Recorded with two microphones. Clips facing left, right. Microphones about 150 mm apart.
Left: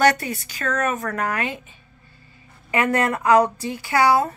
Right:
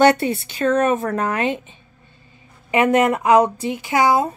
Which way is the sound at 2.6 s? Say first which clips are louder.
Right 5 dB; 20° right (ahead or behind).